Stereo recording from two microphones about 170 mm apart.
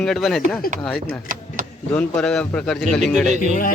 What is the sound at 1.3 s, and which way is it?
Vehicle, 55° right (ahead or behind).